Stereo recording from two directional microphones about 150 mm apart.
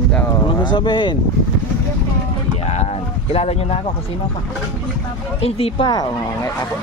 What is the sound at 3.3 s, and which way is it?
Speech, 45° left (ahead or behind).